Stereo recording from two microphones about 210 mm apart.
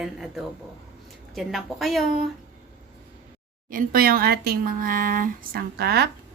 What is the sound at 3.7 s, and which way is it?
Speech, 40° right (ahead or behind).